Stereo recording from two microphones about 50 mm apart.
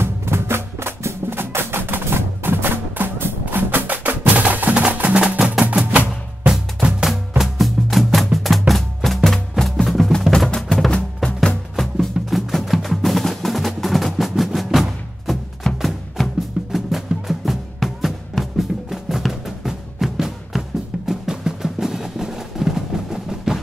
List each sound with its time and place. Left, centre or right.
0.0 s music: right
6.4 s music: centre
10.3 s music: centre